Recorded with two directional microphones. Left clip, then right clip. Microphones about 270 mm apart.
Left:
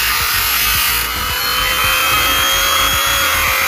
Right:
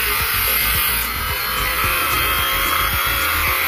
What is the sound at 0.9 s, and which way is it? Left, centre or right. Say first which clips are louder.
Wood: left 4 dB; centre.